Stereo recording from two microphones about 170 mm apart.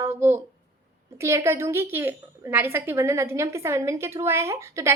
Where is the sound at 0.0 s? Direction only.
15° right (ahead or behind).